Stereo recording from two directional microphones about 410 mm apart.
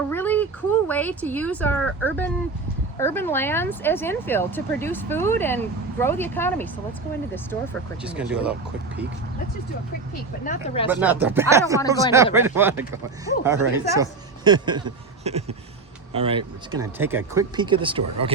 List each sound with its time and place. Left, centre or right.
0.1 s speech: centre
10.4 s speech: centre
10.8 s speech: centre